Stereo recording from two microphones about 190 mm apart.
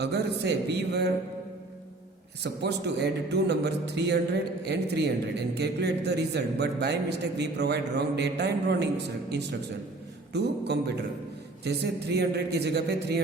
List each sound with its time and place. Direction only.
0.0 s a man's voice: 60° right (ahead or behind)
2.4 s a man's voice: 60° right (ahead or behind)
10.3 s a man's voice: 60° right (ahead or behind)